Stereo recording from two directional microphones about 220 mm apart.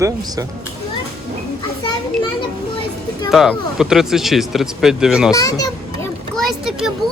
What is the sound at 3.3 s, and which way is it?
Speech, centre (ahead or behind).